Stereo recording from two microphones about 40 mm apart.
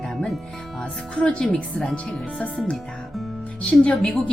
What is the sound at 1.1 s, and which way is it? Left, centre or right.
Speech, left.